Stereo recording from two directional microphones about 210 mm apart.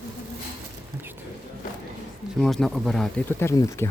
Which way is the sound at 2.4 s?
Centre (ahead or behind).